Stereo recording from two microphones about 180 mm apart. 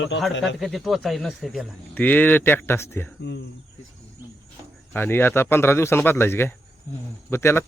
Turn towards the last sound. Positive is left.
turn(degrees=15)  # may be behind; listen again after turning